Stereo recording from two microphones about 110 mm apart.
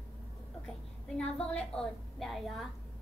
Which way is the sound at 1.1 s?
10° left (ahead or behind).